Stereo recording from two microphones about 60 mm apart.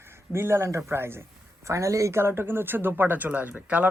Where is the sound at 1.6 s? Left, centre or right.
Right.